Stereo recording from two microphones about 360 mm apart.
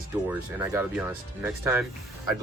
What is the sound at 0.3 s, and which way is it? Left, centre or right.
Speech, centre.